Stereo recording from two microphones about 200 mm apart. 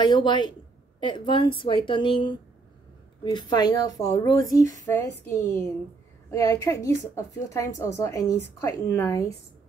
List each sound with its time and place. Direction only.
0.0 s a woman's voice: 20° left (ahead or behind)